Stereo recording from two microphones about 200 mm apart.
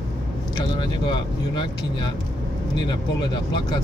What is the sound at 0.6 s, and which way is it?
Speech, 20° left (ahead or behind).